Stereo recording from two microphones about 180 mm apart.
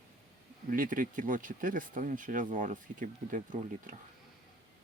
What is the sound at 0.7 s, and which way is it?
Speech, 50° right (ahead or behind).